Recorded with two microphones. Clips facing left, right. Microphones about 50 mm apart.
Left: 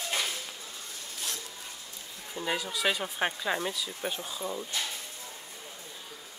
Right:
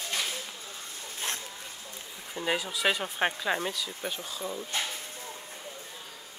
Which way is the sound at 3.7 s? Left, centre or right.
Centre.